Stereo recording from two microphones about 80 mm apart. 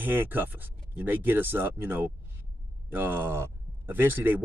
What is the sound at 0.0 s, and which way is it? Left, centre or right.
Speech, right.